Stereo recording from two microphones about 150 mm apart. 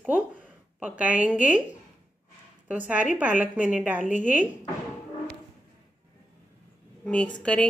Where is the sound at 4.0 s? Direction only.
55° left (ahead or behind).